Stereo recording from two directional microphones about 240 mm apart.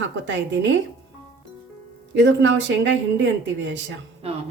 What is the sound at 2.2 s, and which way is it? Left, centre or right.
Speech, right.